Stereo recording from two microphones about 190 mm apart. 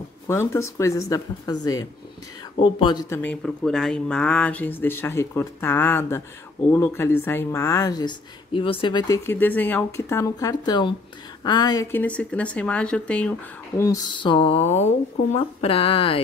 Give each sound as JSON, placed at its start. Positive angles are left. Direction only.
{"t": 0.3, "sound": "a woman's voice", "side_deg": 15}
{"t": 3.2, "sound": "a woman's voice", "side_deg": 5}
{"t": 13.7, "sound": "speech", "side_deg": 20}